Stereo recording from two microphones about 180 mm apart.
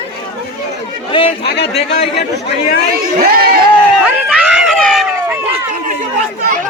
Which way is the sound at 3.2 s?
55° right (ahead or behind).